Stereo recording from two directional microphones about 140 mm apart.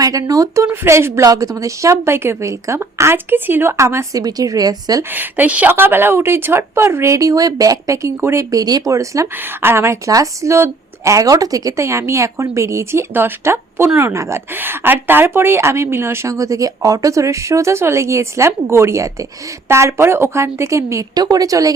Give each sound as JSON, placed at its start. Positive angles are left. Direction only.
{"t": 0.0, "sound": "speech", "side_deg": -25}
{"t": 5.1, "sound": "speech", "side_deg": -15}